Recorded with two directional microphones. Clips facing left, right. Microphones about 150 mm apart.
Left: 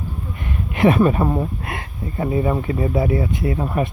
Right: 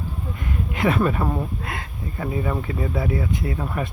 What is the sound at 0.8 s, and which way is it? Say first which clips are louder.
Speech: left 6 dB; 20° left (ahead or behind).